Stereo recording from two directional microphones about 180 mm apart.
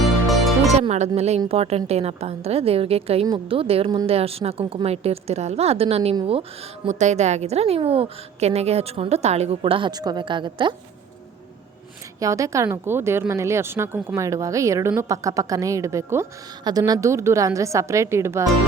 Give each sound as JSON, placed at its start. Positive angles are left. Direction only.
{"t": 0.3, "sound": "music", "side_deg": 0}
{"t": 0.7, "sound": "music", "side_deg": -40}
{"t": 1.5, "sound": "a woman's voice", "side_deg": -35}
{"t": 12.2, "sound": "a woman's voice", "side_deg": -15}